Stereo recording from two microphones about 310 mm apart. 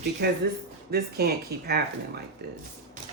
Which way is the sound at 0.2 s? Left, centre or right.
Right.